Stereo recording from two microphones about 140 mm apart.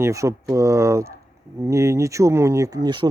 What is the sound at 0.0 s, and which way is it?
Speech, 20° right (ahead or behind).